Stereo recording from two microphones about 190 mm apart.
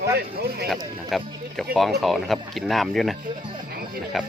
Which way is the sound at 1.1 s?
Centre (ahead or behind).